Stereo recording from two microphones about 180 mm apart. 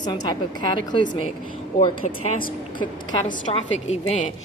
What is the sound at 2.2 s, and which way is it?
A woman's voice, 45° left (ahead or behind).